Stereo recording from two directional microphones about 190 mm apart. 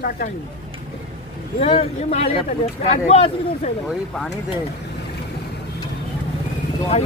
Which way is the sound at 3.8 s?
Centre (ahead or behind).